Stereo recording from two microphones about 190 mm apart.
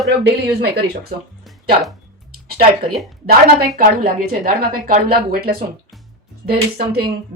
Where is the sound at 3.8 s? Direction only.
45° right (ahead or behind).